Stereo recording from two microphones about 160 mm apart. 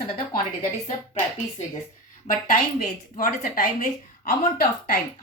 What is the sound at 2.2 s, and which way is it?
A woman's voice, 55° left (ahead or behind).